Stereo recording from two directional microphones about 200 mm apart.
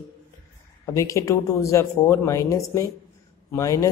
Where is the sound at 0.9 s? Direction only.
15° left (ahead or behind).